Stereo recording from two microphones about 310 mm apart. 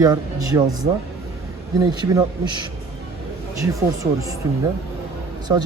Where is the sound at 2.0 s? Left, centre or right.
Centre.